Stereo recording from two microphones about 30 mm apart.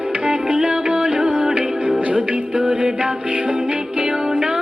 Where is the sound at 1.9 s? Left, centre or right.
Right.